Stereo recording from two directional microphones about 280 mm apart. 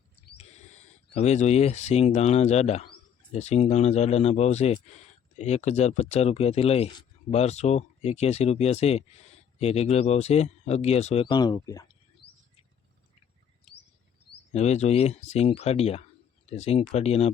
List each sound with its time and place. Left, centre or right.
0.3 s speech: left
14.5 s speech: left